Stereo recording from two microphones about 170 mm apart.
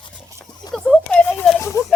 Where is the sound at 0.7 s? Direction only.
5° left (ahead or behind).